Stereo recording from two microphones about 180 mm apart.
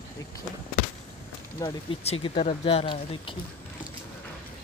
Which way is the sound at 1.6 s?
30° left (ahead or behind).